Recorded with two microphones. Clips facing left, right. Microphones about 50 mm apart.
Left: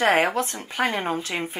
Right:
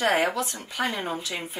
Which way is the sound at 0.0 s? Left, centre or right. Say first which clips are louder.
Left 3 dB; left.